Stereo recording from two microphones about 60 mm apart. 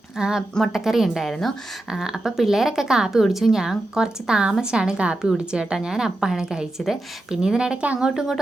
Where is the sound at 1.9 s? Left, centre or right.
Centre.